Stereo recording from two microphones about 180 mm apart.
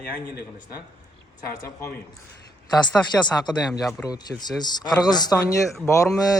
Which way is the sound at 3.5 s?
20° left (ahead or behind).